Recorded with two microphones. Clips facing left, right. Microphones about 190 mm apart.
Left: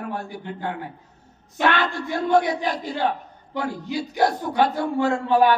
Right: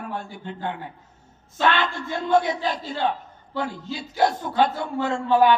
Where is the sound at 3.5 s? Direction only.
15° left (ahead or behind).